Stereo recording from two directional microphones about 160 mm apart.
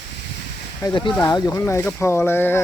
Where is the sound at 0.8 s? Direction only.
30° left (ahead or behind); by 2.6 s 15° left (ahead or behind).